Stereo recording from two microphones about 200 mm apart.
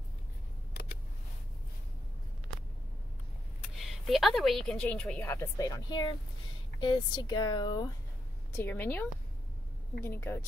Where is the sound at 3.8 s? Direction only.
Centre (ahead or behind); by 7.8 s 20° left (ahead or behind).